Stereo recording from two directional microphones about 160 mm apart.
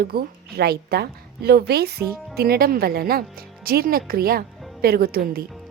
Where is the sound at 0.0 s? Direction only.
70° right (ahead or behind).